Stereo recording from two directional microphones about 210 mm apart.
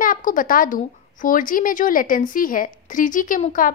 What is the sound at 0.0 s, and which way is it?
A woman's voice, 40° left (ahead or behind).